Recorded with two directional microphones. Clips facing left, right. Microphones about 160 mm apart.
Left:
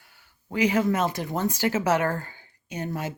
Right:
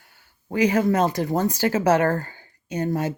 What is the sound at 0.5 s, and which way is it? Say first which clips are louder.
Speech: right 3 dB; 45° right (ahead or behind).